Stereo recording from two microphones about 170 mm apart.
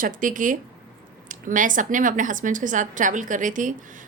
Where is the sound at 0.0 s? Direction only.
50° right (ahead or behind).